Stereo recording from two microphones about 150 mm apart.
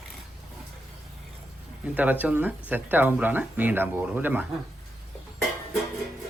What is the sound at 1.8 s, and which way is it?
Speech, 10° right (ahead or behind).